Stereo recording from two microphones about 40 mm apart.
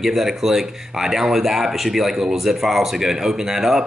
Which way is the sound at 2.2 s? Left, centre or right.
Centre.